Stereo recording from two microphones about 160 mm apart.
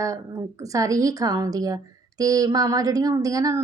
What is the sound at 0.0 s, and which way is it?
A woman's voice, 20° right (ahead or behind).